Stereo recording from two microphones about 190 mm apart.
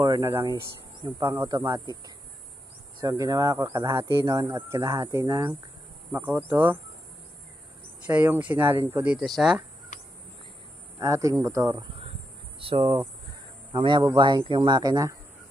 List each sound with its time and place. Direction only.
0.0 s speech: 15° right (ahead or behind)
3.0 s speech: 20° right (ahead or behind)
8.1 s speech: 10° right (ahead or behind)
11.0 s speech: 15° right (ahead or behind)
12.5 s a man's voice: 30° right (ahead or behind)